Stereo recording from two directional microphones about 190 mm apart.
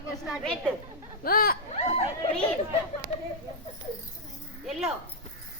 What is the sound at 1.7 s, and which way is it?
Chatter, 30° left (ahead or behind).